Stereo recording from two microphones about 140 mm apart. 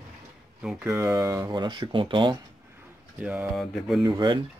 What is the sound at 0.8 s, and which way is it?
Speech, 20° right (ahead or behind).